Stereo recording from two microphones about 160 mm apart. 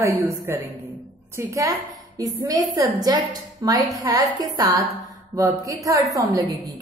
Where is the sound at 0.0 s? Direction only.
20° right (ahead or behind).